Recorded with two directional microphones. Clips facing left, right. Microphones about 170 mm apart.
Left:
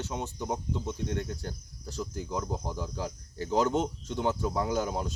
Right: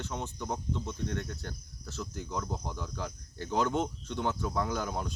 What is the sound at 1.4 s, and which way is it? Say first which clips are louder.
Speech: left 3 dB; 35° left (ahead or behind).